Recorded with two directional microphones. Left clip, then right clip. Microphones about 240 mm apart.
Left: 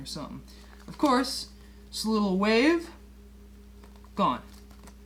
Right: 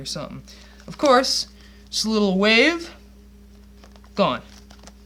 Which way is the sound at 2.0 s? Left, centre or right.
Right.